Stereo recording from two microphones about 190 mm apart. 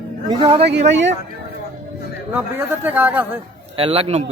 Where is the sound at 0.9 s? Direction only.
70° right (ahead or behind).